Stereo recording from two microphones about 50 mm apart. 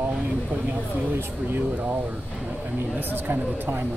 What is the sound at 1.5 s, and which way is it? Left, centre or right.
Speech, right.